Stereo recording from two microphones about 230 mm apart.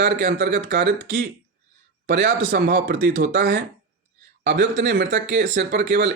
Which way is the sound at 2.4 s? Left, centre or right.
Right.